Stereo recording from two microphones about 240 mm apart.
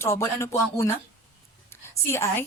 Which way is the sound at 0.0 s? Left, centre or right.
Centre.